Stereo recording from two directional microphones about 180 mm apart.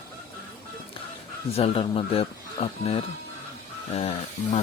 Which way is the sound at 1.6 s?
30° left (ahead or behind).